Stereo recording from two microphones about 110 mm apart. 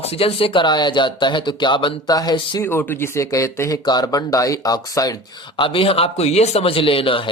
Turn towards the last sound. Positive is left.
turn(degrees=55)  # may be behind; listen again after turning